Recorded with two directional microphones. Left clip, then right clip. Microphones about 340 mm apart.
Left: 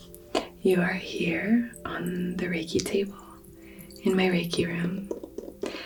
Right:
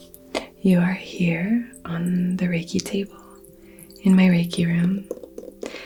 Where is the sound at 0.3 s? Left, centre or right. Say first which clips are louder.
Right 1 dB; right.